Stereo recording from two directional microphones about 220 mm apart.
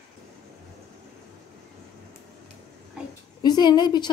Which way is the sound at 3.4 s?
20° left (ahead or behind).